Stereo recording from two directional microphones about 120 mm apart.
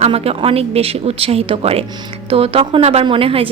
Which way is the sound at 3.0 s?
50° right (ahead or behind).